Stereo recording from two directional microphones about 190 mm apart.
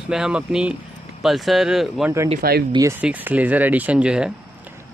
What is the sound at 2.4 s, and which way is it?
Speech, 55° right (ahead or behind).